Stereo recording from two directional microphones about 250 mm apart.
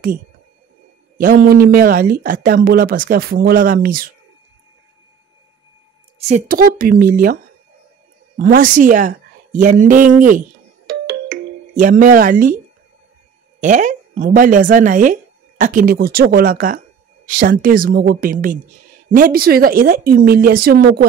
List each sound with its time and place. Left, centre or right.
1.1 s speech: right
6.1 s speech: right
8.4 s speech: right
11.1 s music: right
13.6 s speech: right